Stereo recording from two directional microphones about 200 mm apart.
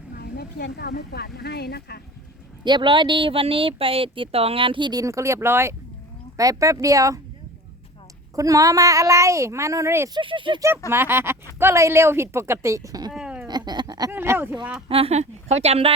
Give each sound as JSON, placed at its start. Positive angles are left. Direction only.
{"t": 0.2, "sound": "speech", "side_deg": 55}
{"t": 2.6, "sound": "speech", "side_deg": -25}
{"t": 8.4, "sound": "speech", "side_deg": -15}
{"t": 10.2, "sound": "speech", "side_deg": -25}
{"t": 10.8, "sound": "speech", "side_deg": -10}
{"t": 13.1, "sound": "a sound", "side_deg": -5}
{"t": 13.5, "sound": "a sound", "side_deg": -20}
{"t": 14.1, "sound": "speech", "side_deg": -10}
{"t": 14.8, "sound": "speech", "side_deg": -30}